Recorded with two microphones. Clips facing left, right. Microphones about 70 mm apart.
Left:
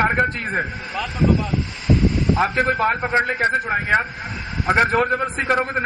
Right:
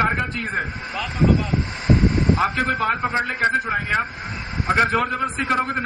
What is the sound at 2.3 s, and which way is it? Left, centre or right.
A man's voice, left.